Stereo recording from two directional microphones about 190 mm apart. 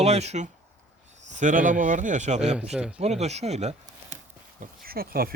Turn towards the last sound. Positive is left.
turn(degrees=-50)  # may be behind; listen again after turning